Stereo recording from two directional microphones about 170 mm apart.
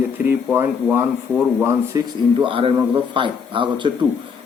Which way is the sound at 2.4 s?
30° right (ahead or behind).